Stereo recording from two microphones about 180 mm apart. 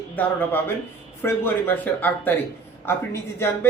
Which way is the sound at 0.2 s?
10° left (ahead or behind).